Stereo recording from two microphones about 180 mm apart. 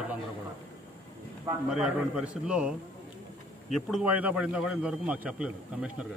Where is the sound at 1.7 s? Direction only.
5° right (ahead or behind).